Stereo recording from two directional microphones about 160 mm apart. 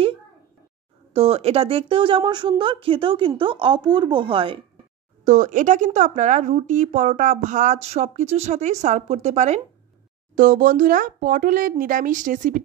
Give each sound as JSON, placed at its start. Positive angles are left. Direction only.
{"t": 1.1, "sound": "a woman's voice", "side_deg": -40}
{"t": 5.2, "sound": "a woman's voice", "side_deg": -50}
{"t": 10.3, "sound": "speech", "side_deg": -55}